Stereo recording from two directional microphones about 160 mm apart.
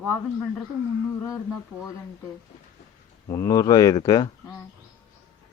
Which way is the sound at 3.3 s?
25° left (ahead or behind).